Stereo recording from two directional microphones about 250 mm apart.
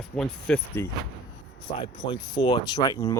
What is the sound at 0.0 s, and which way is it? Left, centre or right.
Speech, centre.